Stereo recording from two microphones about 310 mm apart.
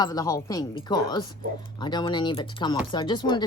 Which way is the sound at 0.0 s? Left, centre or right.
Centre.